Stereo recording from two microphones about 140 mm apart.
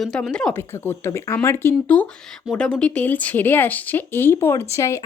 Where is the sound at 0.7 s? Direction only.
15° left (ahead or behind).